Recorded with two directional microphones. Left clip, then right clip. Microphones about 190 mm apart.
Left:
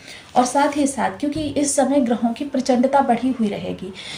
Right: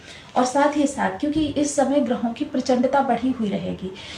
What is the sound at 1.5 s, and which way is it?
A woman's voice, 45° left (ahead or behind).